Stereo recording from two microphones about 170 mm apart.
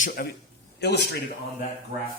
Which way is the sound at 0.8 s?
80° left.